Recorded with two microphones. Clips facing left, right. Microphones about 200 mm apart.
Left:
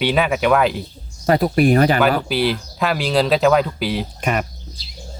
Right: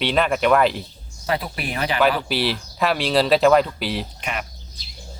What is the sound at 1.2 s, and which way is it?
Speech, 45° left (ahead or behind).